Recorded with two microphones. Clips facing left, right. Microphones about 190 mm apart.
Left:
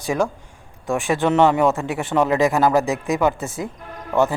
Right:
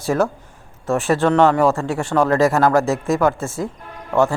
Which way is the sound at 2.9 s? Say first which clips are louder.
Right 2 dB; centre (ahead or behind).